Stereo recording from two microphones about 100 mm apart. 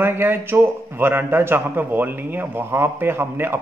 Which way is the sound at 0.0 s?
20° right (ahead or behind).